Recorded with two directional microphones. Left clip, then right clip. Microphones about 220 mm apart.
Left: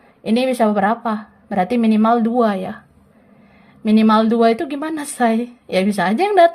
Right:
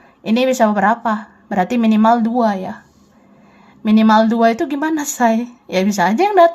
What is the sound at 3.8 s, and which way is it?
A woman's voice, 5° left (ahead or behind).